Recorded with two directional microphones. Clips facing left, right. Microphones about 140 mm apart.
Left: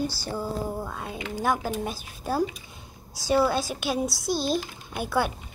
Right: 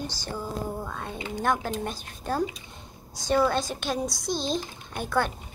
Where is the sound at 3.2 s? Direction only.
5° left (ahead or behind).